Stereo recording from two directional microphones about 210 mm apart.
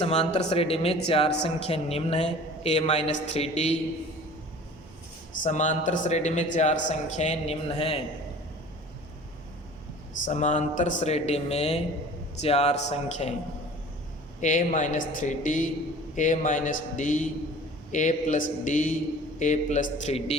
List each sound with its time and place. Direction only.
0.0 s a woman's voice: 30° left (ahead or behind)
5.4 s a woman's voice: 35° left (ahead or behind)
10.2 s a woman's voice: 35° left (ahead or behind)
14.4 s speech: 35° left (ahead or behind)